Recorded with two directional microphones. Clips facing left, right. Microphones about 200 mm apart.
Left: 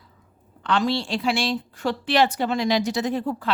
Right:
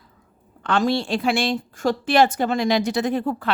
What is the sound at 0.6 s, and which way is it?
A woman's voice, 50° right (ahead or behind).